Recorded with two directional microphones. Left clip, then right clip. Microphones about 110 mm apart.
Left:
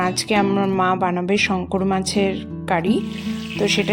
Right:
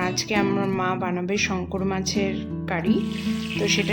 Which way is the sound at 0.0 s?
40° left (ahead or behind).